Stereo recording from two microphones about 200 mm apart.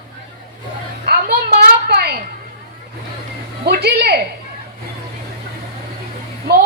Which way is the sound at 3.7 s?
50° right (ahead or behind).